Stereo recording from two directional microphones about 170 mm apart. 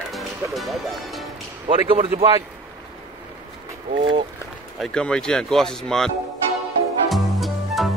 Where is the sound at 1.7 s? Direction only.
35° right (ahead or behind).